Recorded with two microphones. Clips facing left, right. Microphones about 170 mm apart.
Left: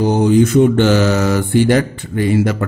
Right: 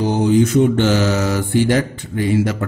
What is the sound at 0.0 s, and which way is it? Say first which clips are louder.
Mantra: left 3 dB; 55° left (ahead or behind).